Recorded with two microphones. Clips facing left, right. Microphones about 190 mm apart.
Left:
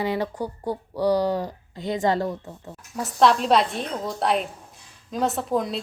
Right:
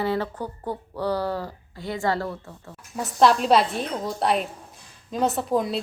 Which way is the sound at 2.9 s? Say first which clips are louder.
Even; centre (ahead or behind).